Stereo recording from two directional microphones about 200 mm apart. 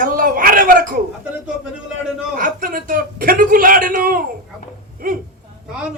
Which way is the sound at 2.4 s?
45° right (ahead or behind).